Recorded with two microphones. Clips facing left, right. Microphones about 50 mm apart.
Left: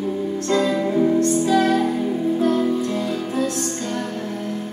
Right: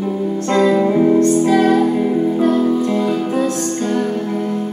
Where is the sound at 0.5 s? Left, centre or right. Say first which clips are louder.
Right 6 dB; right.